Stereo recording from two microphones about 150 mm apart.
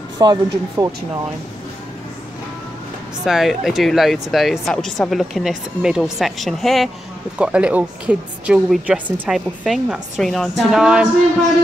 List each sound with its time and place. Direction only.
0.2 s speech: 25° right (ahead or behind)
3.3 s a woman's voice: centre (ahead or behind)